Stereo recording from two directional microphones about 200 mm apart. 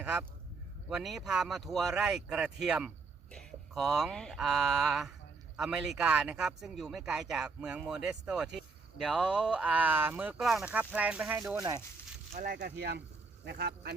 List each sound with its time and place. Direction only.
0.0 s a man's voice: 5° right (ahead or behind)
12.3 s speech: 40° right (ahead or behind); by 13.9 s 55° right (ahead or behind)